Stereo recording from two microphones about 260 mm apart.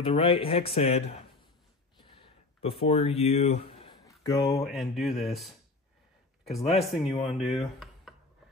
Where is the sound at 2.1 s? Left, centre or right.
Left.